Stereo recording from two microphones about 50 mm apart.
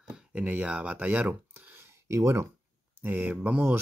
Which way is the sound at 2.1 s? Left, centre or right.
Right.